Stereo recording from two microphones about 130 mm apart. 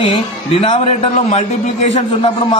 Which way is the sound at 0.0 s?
45° left (ahead or behind).